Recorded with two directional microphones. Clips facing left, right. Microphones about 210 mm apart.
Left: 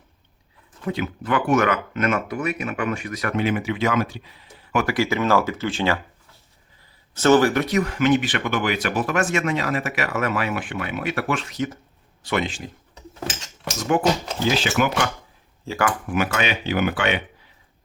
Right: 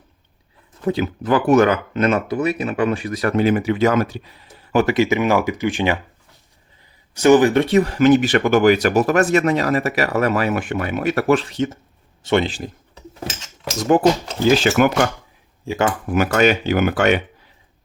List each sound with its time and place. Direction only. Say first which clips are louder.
0.9 s speech: right 6 dB; 35° right (ahead or behind)
4.7 s speech: right 5 dB; 25° right (ahead or behind)
7.1 s speech: right 4 dB; 15° right (ahead or behind); by 12.7 s 35° right (ahead or behind)
14.6 s speech: right 6 dB; 50° right (ahead or behind)
15.6 s speech: right 4 dB; 15° right (ahead or behind)
16.0 s speech: right 7 dB; 40° right (ahead or behind)